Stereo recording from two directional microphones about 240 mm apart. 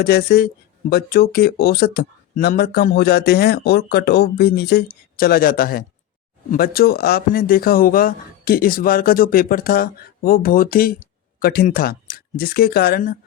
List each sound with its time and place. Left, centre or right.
0.0 s speech: left